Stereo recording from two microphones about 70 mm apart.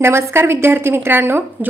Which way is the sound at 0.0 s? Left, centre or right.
Right.